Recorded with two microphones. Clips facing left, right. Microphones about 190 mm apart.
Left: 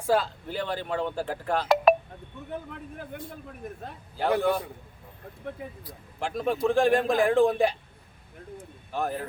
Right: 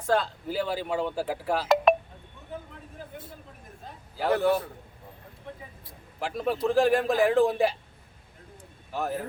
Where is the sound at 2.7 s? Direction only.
65° left (ahead or behind).